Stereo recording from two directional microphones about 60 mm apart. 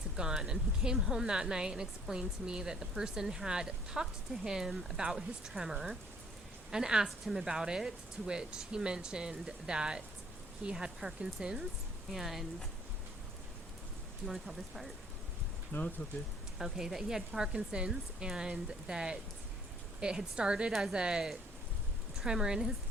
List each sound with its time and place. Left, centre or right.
0.2 s speech: centre
14.3 s speech: centre
15.7 s speech: left
16.6 s speech: centre